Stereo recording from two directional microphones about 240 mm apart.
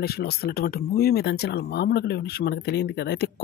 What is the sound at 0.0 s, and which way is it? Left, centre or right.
Speech, left.